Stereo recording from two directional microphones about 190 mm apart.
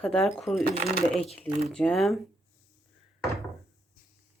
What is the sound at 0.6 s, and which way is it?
Speech, 55° right (ahead or behind).